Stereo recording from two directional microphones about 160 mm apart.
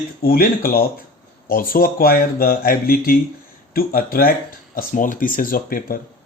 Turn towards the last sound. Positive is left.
turn(degrees=65)  # may be behind; listen again after turning